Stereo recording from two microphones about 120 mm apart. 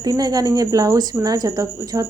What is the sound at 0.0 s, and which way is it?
A woman's voice, 30° right (ahead or behind).